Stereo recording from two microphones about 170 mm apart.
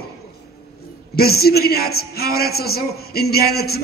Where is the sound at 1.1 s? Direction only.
65° left (ahead or behind).